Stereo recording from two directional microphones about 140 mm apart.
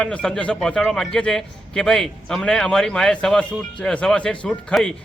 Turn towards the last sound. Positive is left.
turn(degrees=0)  # may be behind; listen again after turning